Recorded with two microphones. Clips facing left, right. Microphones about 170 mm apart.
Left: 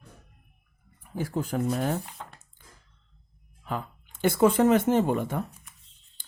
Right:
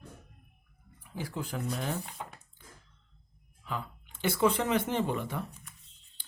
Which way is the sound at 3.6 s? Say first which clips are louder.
Left 4 dB; 45° left (ahead or behind).